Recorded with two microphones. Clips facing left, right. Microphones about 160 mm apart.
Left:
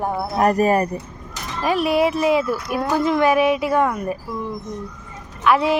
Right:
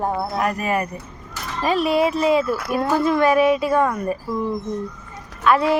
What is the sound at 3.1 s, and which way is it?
Music, 10° left (ahead or behind).